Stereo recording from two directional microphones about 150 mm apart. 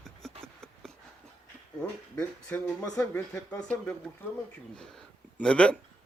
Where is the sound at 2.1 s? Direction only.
10° left (ahead or behind).